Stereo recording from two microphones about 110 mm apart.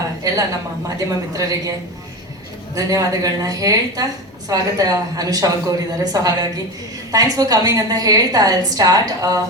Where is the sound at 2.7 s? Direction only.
30° right (ahead or behind).